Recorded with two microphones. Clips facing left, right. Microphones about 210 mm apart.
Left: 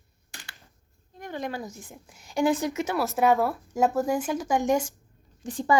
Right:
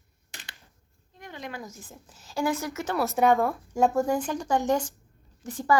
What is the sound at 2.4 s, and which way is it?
Speech, 25° left (ahead or behind).